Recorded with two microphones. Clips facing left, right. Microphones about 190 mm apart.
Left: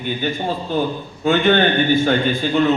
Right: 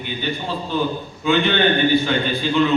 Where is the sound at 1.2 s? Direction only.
45° left (ahead or behind).